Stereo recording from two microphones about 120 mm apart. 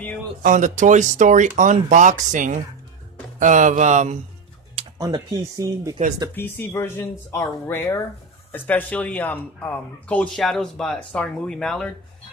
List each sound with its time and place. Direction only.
0.4 s speech: 90° right
4.9 s speech: 30° right (ahead or behind)
6.3 s speech: 20° left (ahead or behind)